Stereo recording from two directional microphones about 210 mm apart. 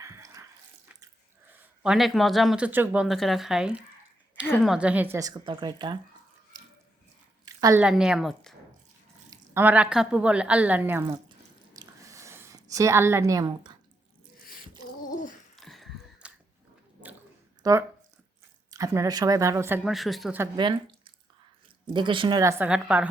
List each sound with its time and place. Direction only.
0.0 s water: 15° right (ahead or behind)
1.8 s speech: centre (ahead or behind)
4.4 s a woman's voice: 10° left (ahead or behind)
4.7 s speech: 5° right (ahead or behind)
6.5 s drip: 20° right (ahead or behind)
7.4 s a woman's voice: 15° right (ahead or behind); by 8.5 s centre (ahead or behind)
9.3 s speech: 10° right (ahead or behind)
11.8 s a sound: 15° right (ahead or behind)
15.5 s a sound: centre (ahead or behind)
17.6 s speech: 15° right (ahead or behind)
20.4 s speech: 20° right (ahead or behind); by 23.0 s 5° right (ahead or behind)